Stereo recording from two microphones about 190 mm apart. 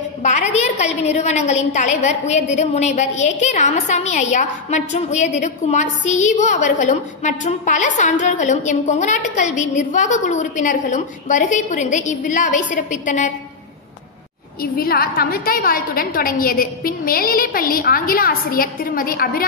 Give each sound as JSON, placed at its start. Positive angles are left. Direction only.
{"t": 0.2, "sound": "a woman's voice", "side_deg": 40}
{"t": 14.6, "sound": "a woman's voice", "side_deg": 55}